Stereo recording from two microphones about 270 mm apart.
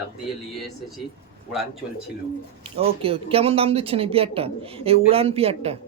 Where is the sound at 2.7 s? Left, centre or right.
Right.